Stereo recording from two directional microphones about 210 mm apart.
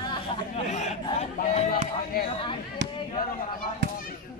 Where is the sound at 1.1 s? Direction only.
35° left (ahead or behind).